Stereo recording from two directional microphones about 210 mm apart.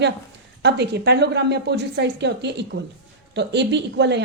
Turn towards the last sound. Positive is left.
turn(degrees=-55)  # may be behind; listen again after turning